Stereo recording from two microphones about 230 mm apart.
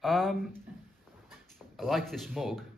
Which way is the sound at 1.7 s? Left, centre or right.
Centre.